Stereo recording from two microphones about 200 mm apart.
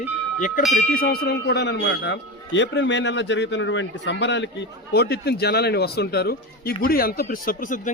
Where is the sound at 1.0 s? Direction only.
55° left (ahead or behind).